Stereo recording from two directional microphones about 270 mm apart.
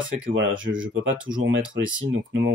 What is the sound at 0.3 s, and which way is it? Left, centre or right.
Speech, right.